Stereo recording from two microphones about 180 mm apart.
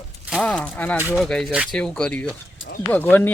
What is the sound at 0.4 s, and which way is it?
Speech, 5° left (ahead or behind).